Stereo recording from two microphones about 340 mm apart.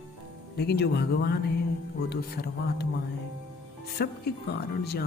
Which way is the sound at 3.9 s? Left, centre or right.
Left.